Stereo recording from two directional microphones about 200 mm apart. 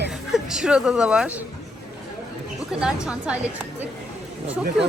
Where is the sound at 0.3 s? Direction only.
Centre (ahead or behind).